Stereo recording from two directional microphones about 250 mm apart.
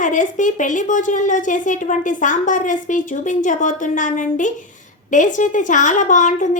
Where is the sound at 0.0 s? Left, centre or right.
Left.